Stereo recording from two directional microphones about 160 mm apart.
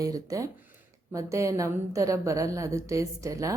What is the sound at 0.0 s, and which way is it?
A woman's voice, 20° right (ahead or behind).